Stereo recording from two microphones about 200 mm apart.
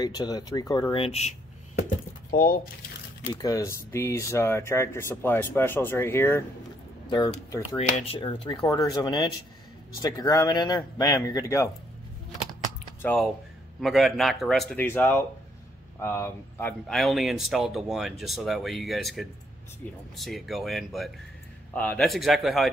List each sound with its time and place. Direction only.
0.0 s speech: 20° left (ahead or behind)
2.3 s speech: 45° left (ahead or behind)
3.4 s speech: 15° left (ahead or behind)
13.0 s a man's voice: 5° left (ahead or behind)
16.8 s a man's voice: centre (ahead or behind)